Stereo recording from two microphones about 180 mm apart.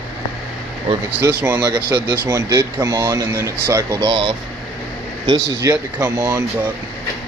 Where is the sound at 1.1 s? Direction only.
10° right (ahead or behind).